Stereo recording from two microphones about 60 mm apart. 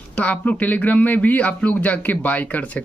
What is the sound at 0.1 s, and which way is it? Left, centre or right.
Speech, left.